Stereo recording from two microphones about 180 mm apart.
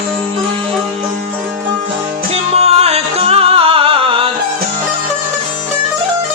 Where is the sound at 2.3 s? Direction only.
35° right (ahead or behind).